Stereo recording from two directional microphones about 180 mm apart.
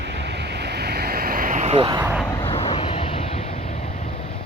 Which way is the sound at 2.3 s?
25° left (ahead or behind).